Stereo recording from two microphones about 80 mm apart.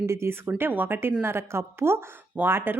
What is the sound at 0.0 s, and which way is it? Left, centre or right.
A woman's voice, right.